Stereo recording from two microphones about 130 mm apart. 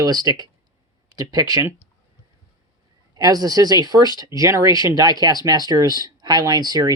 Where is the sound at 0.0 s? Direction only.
30° right (ahead or behind).